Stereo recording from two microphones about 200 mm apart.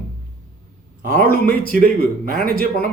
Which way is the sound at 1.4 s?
45° right (ahead or behind).